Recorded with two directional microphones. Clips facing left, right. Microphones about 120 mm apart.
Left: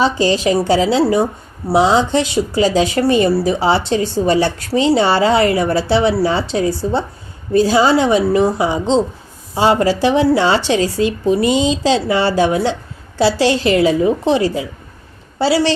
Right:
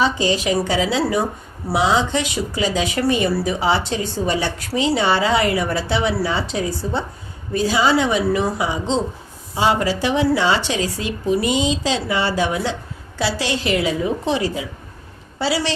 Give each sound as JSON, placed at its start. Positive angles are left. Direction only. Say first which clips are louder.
{"t": 0.0, "sound": "speech", "louder": "left 4 dB", "side_deg": 35}